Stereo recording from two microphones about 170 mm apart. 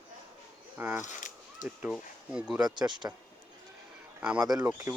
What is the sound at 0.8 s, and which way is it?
Speech, 10° right (ahead or behind).